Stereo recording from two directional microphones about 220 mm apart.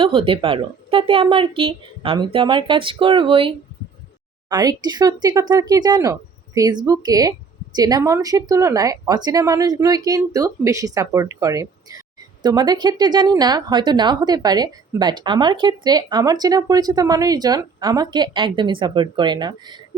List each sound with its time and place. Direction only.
0.0 s a woman's voice: 25° right (ahead or behind)